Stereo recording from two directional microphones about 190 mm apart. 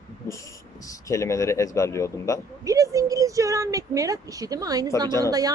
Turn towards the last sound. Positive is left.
turn(degrees=15)  # may be behind; listen again after turning